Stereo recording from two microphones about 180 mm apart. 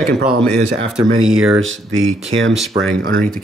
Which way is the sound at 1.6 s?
90° right.